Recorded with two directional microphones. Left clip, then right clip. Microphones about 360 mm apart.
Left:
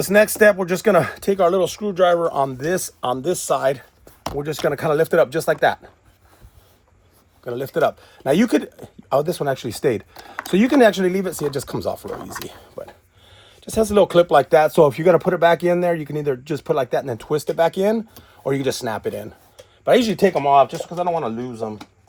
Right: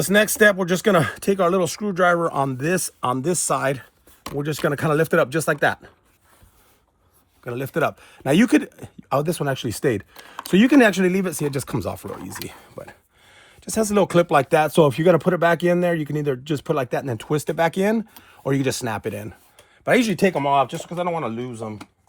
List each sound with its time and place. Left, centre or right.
0.0 s speech: right
7.4 s speech: right
13.7 s speech: right